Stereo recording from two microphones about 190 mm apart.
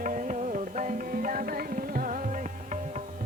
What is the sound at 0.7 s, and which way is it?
Tabla, 45° right (ahead or behind).